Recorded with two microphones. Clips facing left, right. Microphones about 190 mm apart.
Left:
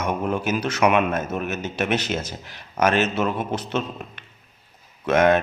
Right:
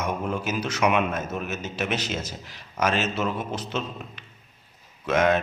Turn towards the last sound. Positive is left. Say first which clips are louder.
# left 4 dB
turn(degrees=55)  # may be behind; listen again after turning